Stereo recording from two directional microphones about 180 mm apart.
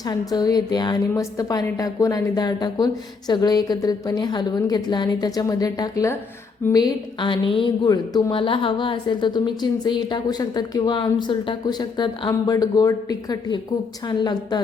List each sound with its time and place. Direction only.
0.1 s a woman's voice: 20° left (ahead or behind)